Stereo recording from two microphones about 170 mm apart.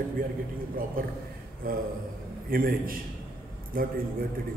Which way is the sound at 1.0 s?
55° right (ahead or behind).